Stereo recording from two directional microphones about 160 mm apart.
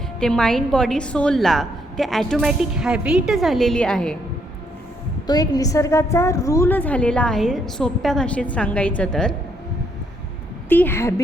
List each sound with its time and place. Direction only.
0.2 s a woman's voice: 5° left (ahead or behind)
5.2 s a woman's voice: 25° left (ahead or behind); by 9.3 s 5° left (ahead or behind)
10.7 s a woman's voice: 15° left (ahead or behind)